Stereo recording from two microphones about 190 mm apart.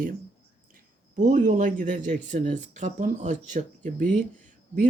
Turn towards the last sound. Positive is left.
turn(degrees=-45)  # may be behind; listen again after turning